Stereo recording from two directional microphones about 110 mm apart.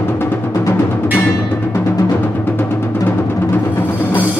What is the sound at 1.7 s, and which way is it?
Timpani, 20° left (ahead or behind).